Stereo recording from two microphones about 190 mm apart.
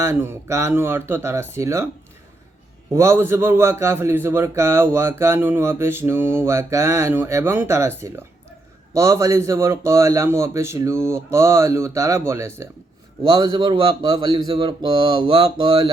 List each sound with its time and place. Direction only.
0.0 s a man's voice: 10° right (ahead or behind)
2.9 s a man's voice: 15° right (ahead or behind)